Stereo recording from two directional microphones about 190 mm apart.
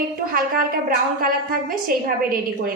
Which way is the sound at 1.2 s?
50° right (ahead or behind).